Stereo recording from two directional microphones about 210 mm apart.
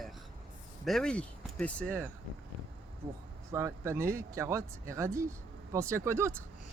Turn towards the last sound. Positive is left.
turn(degrees=-10)  # may be behind; listen again after turning